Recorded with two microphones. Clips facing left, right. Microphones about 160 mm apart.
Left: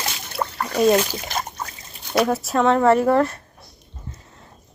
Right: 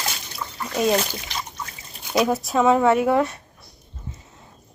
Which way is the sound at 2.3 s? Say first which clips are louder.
Right 2 dB; centre (ahead or behind).